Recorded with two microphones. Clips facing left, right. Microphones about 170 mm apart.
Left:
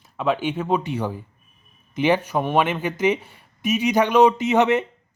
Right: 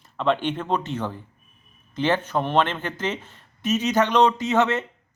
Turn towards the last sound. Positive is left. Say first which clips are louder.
# left 3 dB
turn(degrees=15)  # may be behind; listen again after turning